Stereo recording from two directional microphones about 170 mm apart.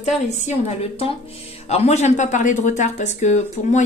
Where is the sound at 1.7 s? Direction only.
40° left (ahead or behind).